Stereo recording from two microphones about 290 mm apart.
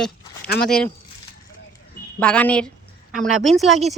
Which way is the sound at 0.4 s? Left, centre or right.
Left.